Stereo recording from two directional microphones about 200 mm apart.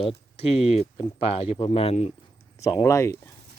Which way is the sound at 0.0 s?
30° left (ahead or behind).